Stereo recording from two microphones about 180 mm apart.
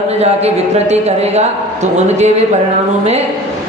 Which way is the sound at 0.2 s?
35° right (ahead or behind).